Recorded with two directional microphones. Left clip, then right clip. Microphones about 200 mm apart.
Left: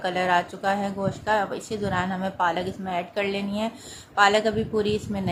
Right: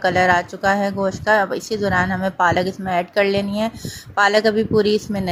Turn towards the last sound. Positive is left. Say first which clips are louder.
# right 8 dB
turn(degrees=-30)  # may be behind; listen again after turning